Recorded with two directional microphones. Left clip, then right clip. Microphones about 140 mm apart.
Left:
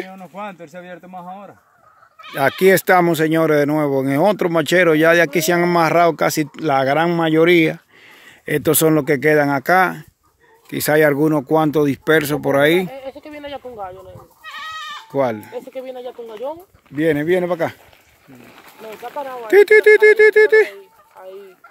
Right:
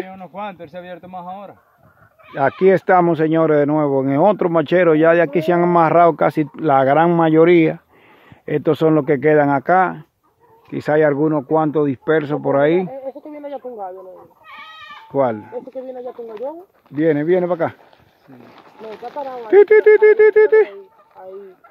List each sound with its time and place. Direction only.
0.1 s speech: 30° left (ahead or behind); by 7.8 s 15° left (ahead or behind)
8.3 s speech: 30° left (ahead or behind)
13.2 s a sound: 20° right (ahead or behind)
15.1 s speech: 20° left (ahead or behind)
17.0 s speech: 15° left (ahead or behind)
18.4 s a sound: 35° left (ahead or behind)
19.4 s speech: 25° left (ahead or behind)